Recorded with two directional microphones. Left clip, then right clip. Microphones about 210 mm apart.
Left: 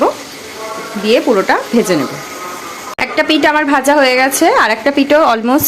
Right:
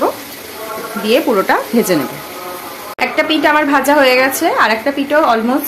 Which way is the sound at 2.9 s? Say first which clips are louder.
Left 1 dB; 30° left (ahead or behind).